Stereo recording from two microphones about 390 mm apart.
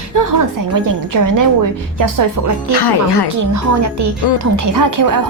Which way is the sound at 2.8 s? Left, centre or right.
Left.